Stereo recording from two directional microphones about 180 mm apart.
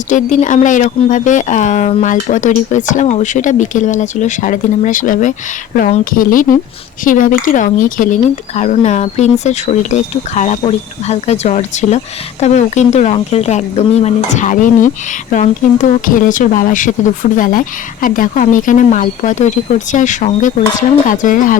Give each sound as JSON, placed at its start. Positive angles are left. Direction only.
{"t": 0.1, "sound": "speech", "side_deg": 45}